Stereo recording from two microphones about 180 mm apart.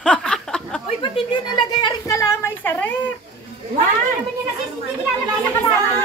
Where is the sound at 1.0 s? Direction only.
25° left (ahead or behind).